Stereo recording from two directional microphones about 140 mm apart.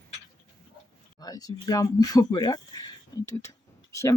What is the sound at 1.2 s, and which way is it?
Speech, 25° left (ahead or behind).